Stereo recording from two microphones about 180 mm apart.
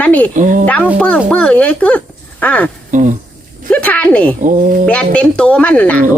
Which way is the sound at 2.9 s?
45° right (ahead or behind).